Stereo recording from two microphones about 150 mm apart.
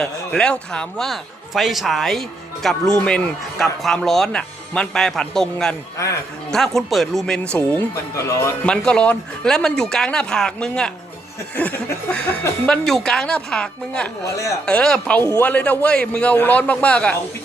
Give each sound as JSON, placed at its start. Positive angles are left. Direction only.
{"t": 0.0, "sound": "a man's voice", "side_deg": 5}
{"t": 8.1, "sound": "speech", "side_deg": 20}
{"t": 8.6, "sound": "a man's voice", "side_deg": 5}